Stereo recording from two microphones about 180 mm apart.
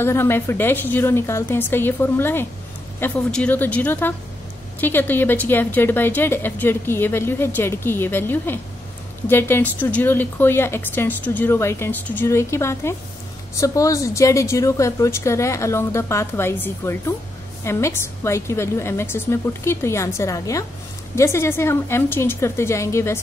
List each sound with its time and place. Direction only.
0.0 s speech: 15° left (ahead or behind)